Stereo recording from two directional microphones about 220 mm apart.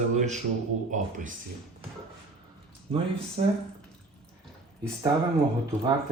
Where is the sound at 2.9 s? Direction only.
25° right (ahead or behind).